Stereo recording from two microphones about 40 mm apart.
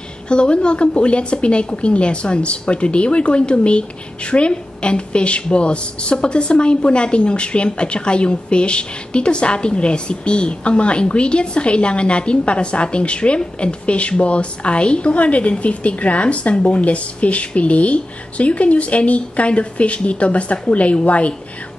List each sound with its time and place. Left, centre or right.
0.3 s a woman's voice: left